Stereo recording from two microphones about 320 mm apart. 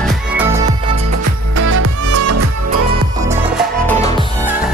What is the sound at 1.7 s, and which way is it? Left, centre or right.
Music, right.